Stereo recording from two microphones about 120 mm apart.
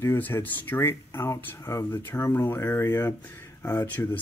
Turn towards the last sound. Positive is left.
turn(degrees=20)  # may be behind; listen again after turning